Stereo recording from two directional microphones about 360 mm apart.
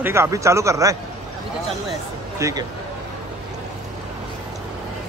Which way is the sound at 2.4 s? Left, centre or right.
Centre.